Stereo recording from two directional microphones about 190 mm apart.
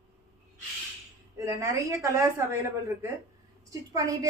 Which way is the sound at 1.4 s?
15° right (ahead or behind).